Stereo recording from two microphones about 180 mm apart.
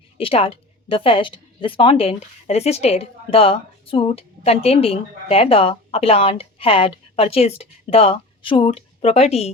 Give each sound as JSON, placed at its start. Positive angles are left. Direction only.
{"t": 0.2, "sound": "speech", "side_deg": 30}